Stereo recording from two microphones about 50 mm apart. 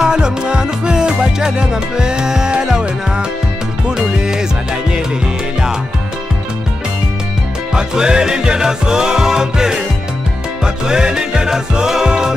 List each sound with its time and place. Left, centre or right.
0.0 s music: centre
7.7 s music: centre